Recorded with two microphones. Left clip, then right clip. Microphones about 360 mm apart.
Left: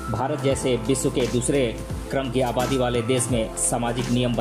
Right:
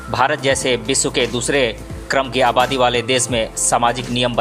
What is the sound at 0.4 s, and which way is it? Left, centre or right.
Speech, centre.